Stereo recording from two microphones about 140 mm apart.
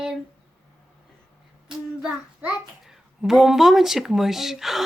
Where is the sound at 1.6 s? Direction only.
5° right (ahead or behind).